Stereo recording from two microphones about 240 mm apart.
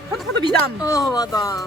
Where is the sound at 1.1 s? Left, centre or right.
Centre.